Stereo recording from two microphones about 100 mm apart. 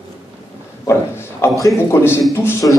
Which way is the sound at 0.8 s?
25° left (ahead or behind).